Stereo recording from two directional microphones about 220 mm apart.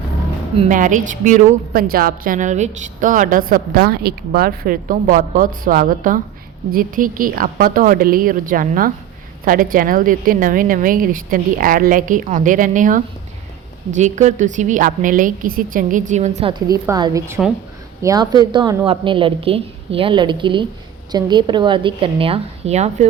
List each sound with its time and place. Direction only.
0.6 s a woman's voice: 35° right (ahead or behind)